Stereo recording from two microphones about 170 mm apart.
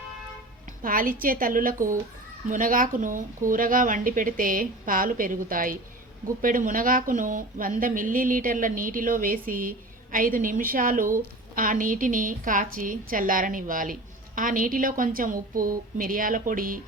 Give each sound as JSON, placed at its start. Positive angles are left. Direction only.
{"t": 0.8, "sound": "a woman's voice", "side_deg": -55}